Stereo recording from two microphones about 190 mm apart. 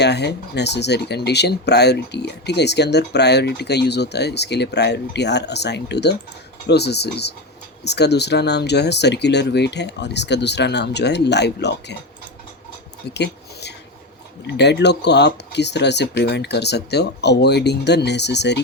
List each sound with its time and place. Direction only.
0.0 s speech: 60° left (ahead or behind)
13.1 s a sound: 60° left (ahead or behind)
14.4 s speech: 65° left (ahead or behind)